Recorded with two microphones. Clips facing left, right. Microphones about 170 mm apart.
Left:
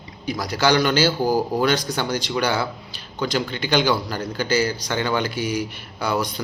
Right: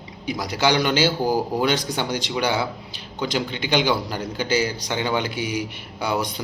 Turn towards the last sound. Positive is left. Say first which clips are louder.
# left 1 dB
turn(degrees=-20)  # may be behind; listen again after turning